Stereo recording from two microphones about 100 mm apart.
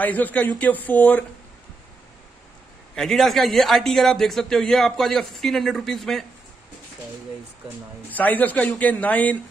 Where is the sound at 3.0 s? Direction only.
5° left (ahead or behind).